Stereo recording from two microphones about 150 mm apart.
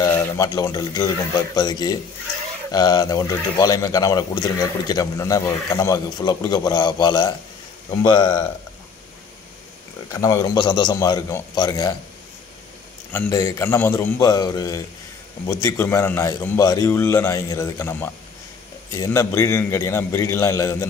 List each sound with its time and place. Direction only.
0.0 s a sound: 20° left (ahead or behind)
0.5 s a man's voice: 25° left (ahead or behind)
10.1 s speech: 20° left (ahead or behind)
13.3 s a man's voice: 20° left (ahead or behind)